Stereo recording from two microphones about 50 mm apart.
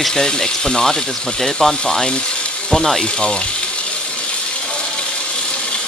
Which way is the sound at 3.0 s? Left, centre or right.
Centre.